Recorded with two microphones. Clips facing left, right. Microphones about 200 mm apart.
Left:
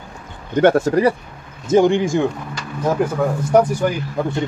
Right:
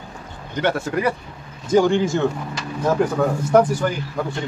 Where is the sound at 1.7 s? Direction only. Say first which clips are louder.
Left 2 dB; 20° left (ahead or behind).